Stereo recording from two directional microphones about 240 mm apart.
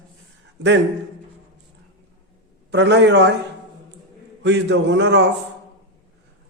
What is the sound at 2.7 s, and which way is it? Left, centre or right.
Speech, right.